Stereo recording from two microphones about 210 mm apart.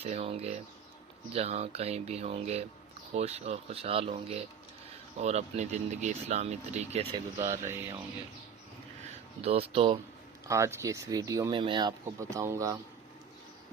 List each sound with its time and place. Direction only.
0.0 s speech: 30° right (ahead or behind)
7.4 s speech: 15° right (ahead or behind)
9.4 s speech: 30° right (ahead or behind)
10.5 s speech: 15° right (ahead or behind)